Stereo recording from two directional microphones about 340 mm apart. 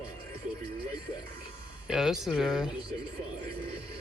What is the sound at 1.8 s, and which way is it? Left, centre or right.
Speech, centre.